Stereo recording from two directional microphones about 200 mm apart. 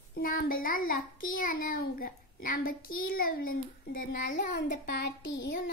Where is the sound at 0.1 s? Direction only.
45° left (ahead or behind); by 5.5 s 65° left (ahead or behind).